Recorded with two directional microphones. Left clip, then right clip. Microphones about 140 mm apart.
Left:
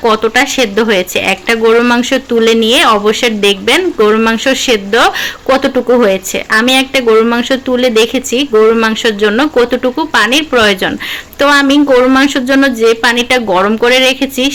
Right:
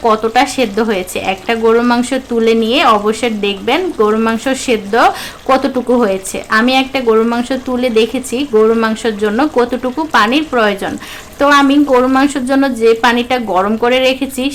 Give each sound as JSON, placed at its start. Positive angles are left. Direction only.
{"t": 0.0, "sound": "a woman's voice", "side_deg": 10}